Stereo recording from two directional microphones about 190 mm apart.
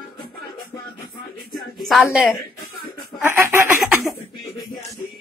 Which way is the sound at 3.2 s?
15° right (ahead or behind).